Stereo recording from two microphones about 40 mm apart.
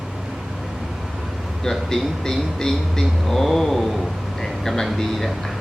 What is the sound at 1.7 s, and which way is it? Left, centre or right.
Speech, centre.